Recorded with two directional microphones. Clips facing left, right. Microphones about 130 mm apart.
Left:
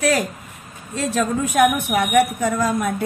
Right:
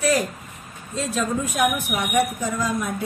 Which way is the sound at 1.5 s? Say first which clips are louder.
Left 9 dB; 70° left (ahead or behind).